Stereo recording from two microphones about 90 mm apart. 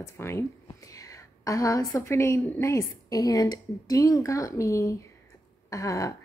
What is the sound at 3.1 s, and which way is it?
Speech, 40° left (ahead or behind).